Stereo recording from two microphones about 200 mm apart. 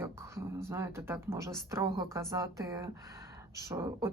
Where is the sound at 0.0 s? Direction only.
15° right (ahead or behind).